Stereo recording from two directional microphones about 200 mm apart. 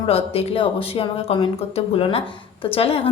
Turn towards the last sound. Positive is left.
turn(degrees=30)  # may be behind; listen again after turning